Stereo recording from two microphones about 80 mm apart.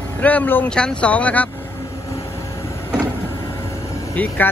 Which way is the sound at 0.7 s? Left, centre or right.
Centre.